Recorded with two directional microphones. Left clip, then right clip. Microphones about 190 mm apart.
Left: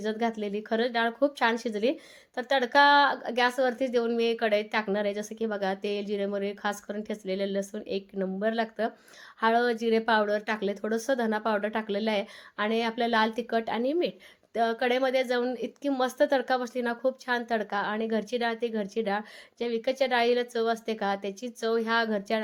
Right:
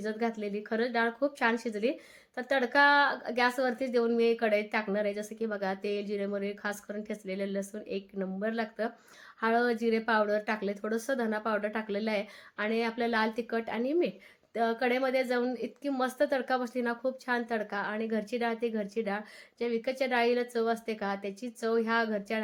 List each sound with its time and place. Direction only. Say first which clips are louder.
0.0 s speech: left 3 dB; 25° left (ahead or behind)